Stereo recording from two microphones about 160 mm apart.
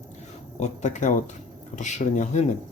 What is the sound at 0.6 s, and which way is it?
Speech, 50° left (ahead or behind).